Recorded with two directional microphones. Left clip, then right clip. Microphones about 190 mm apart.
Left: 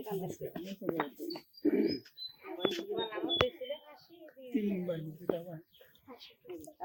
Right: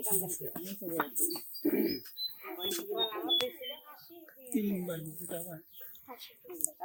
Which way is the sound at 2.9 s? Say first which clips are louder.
Right 3 dB; 50° right (ahead or behind).